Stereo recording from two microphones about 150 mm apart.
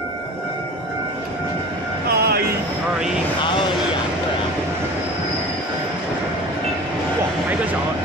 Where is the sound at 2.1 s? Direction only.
90° right.